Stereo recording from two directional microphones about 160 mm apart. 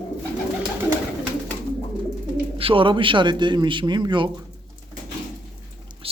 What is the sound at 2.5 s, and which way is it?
A man's voice, 35° right (ahead or behind).